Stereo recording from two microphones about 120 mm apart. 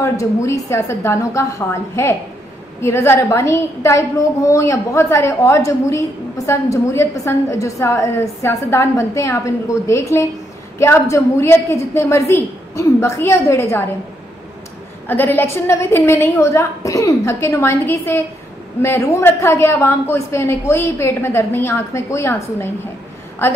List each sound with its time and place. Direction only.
0.0 s a woman's voice: 25° left (ahead or behind)
15.0 s a woman's voice: 15° left (ahead or behind)